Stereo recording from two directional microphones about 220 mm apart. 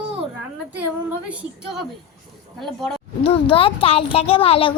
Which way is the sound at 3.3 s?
25° left (ahead or behind).